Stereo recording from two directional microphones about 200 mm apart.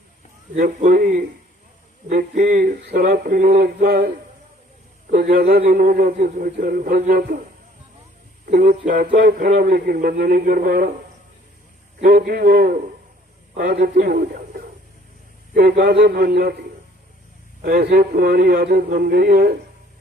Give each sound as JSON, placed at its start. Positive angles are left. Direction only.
{"t": 0.5, "sound": "a man's voice", "side_deg": -45}
{"t": 5.1, "sound": "a man's voice", "side_deg": -45}
{"t": 8.4, "sound": "a man's voice", "side_deg": -50}
{"t": 12.0, "sound": "a man's voice", "side_deg": -50}
{"t": 17.6, "sound": "a man's voice", "side_deg": -50}